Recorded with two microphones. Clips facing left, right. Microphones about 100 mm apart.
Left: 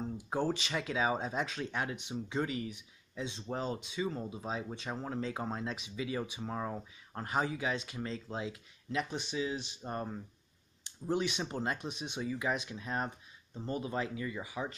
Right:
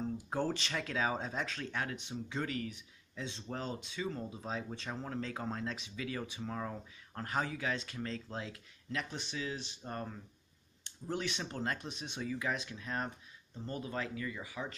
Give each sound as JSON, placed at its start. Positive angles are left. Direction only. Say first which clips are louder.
{"t": 0.0, "sound": "speech", "louder": "left 1 dB", "side_deg": 10}